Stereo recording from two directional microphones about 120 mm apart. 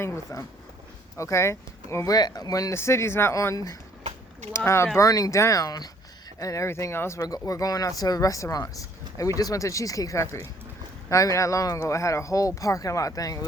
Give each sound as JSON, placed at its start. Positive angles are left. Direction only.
{"t": 0.0, "sound": "speech", "side_deg": 25}